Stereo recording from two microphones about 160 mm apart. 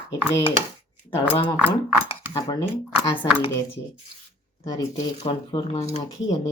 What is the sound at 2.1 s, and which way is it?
Cutlery, 30° left (ahead or behind).